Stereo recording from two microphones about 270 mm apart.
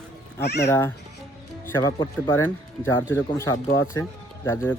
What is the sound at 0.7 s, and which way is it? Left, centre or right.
Speech, centre.